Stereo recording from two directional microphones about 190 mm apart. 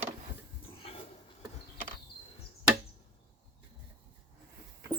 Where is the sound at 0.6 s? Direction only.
30° left (ahead or behind).